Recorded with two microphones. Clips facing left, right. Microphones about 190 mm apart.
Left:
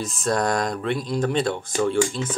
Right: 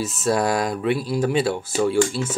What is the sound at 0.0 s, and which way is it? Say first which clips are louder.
Speech: right 2 dB; 5° right (ahead or behind).